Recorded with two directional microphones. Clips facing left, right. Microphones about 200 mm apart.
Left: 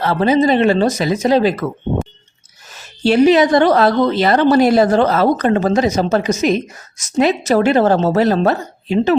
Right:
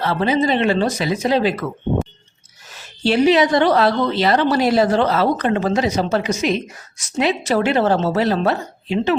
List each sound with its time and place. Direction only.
0.0 s a woman's voice: 45° left (ahead or behind)
3.0 s a woman's voice: 45° left (ahead or behind)